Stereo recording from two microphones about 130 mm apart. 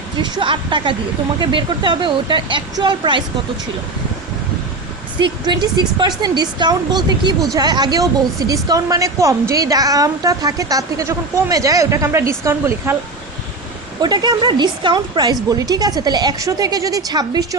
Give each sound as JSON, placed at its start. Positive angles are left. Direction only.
{"t": 0.2, "sound": "speech", "side_deg": -35}
{"t": 5.2, "sound": "a woman's voice", "side_deg": -35}
{"t": 14.0, "sound": "a woman's voice", "side_deg": -35}